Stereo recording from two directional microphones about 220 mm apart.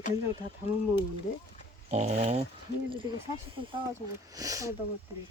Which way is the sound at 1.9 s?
30° right (ahead or behind).